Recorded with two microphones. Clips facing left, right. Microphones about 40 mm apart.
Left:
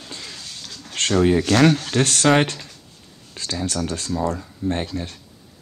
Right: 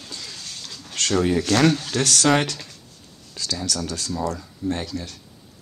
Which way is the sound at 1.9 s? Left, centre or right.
Left.